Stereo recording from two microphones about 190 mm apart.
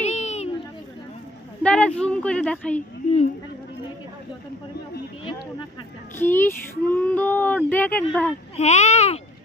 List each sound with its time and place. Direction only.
0.0 s a sound: 35° left (ahead or behind)
1.6 s speech: 5° left (ahead or behind)
6.1 s speech: 10° left (ahead or behind)
8.5 s speech: 35° left (ahead or behind)